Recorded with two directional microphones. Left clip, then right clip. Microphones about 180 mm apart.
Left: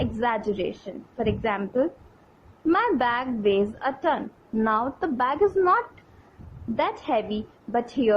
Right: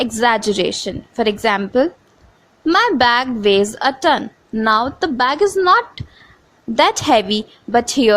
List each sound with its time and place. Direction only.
0.0 s a woman's voice: 50° right (ahead or behind)
6.7 s a woman's voice: 60° right (ahead or behind)